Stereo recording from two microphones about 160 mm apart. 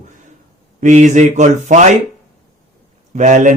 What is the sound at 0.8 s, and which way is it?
Speech, 50° right (ahead or behind).